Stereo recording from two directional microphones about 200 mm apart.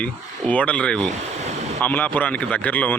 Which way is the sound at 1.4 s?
35° right (ahead or behind).